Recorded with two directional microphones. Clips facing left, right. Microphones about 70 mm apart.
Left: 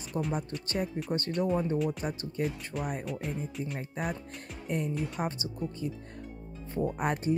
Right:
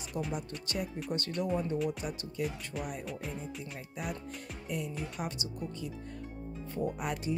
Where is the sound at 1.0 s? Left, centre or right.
Left.